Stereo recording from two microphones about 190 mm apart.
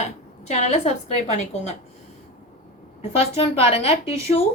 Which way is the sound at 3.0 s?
30° left (ahead or behind).